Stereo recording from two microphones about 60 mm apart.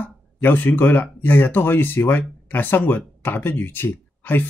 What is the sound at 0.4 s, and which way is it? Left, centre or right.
Speech, left.